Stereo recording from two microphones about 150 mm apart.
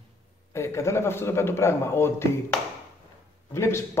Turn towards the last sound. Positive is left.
turn(degrees=15)  # may be behind; listen again after turning